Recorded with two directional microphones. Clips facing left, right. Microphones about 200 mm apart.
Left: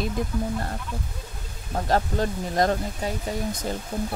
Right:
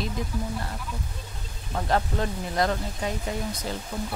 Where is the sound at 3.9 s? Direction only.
30° left (ahead or behind).